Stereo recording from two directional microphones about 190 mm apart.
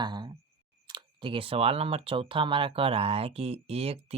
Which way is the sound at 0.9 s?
25° right (ahead or behind).